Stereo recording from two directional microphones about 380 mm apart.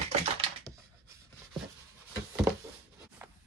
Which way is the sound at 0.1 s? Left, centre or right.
Centre.